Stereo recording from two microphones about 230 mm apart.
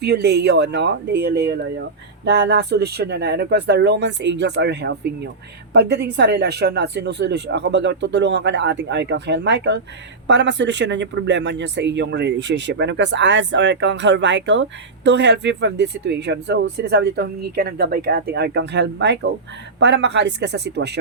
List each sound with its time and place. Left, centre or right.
0.0 s speech: right